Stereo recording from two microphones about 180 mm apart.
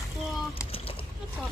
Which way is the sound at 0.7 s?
30° left (ahead or behind).